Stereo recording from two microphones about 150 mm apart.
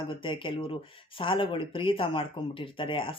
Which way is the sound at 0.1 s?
35° left (ahead or behind).